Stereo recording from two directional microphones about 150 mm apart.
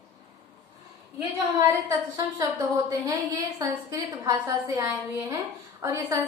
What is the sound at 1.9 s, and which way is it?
A woman's voice, 20° right (ahead or behind).